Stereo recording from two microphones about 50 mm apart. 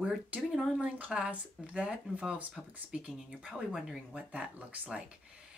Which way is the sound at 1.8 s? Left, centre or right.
Centre.